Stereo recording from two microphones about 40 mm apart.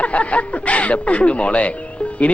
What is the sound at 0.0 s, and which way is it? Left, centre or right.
Speech, left.